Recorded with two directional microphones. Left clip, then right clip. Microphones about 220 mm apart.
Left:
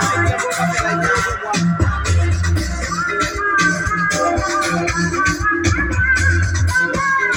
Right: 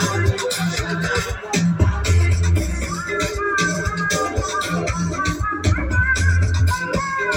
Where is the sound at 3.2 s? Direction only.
35° right (ahead or behind).